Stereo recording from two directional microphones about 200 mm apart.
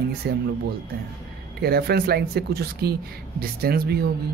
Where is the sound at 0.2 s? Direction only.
55° right (ahead or behind).